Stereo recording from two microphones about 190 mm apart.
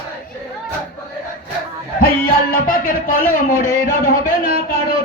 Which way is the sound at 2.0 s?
50° left (ahead or behind).